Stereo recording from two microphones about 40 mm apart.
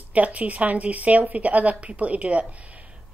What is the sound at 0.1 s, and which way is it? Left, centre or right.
A woman's voice, right.